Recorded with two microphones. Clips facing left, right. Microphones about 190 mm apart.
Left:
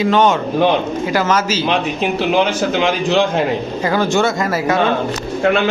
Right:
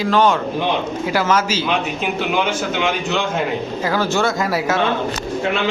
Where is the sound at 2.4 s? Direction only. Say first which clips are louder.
Left 4 dB; 35° left (ahead or behind).